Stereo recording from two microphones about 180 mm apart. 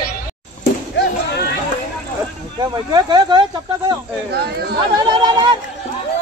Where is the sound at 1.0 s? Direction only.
65° left (ahead or behind).